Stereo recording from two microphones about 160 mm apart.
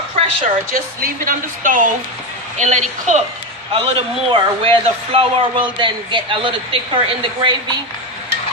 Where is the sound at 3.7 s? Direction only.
35° right (ahead or behind).